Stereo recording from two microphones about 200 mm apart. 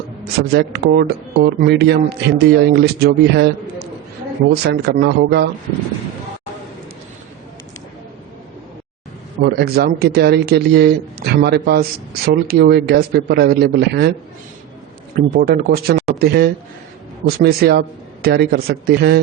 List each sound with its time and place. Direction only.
0.3 s speech: 55° right (ahead or behind)
4.6 s speech: 55° right (ahead or behind)
9.4 s speech: 50° right (ahead or behind)
15.1 s speech: 45° right (ahead or behind)